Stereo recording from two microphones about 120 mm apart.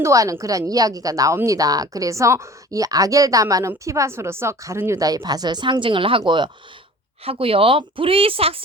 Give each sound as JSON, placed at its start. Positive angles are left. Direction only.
{"t": 0.0, "sound": "a woman's voice", "side_deg": -25}